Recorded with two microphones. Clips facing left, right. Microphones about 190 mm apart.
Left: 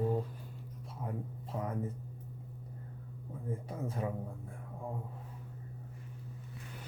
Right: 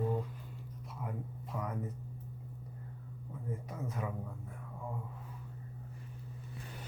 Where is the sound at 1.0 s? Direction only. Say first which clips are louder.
Left 2 dB; 35° left (ahead or behind).